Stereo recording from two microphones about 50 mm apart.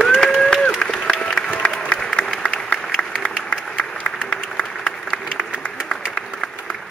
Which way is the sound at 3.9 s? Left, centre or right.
Centre.